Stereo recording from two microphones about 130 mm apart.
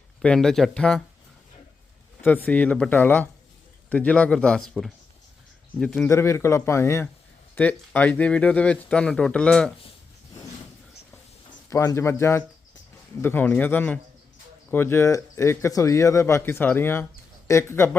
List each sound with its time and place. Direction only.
0.2 s speech: 5° left (ahead or behind)
2.2 s speech: 10° left (ahead or behind)
6.1 s speech: 20° left (ahead or behind)
11.7 s speech: 25° left (ahead or behind)